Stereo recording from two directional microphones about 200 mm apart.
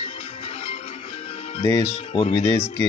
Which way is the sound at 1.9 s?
30° left (ahead or behind).